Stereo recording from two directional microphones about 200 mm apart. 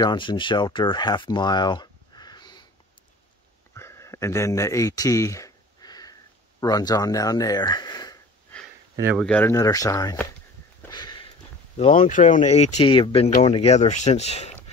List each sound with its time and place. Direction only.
0.0 s speech: 20° left (ahead or behind)
3.7 s a sound: 15° left (ahead or behind)
6.6 s speech: 20° left (ahead or behind)
9.1 s speech: 5° left (ahead or behind)
10.9 s sniff: 20° left (ahead or behind)
11.7 s speech: 40° left (ahead or behind)